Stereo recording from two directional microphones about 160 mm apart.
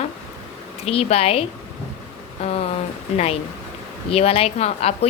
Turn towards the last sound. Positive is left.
turn(degrees=40)  # may be behind; listen again after turning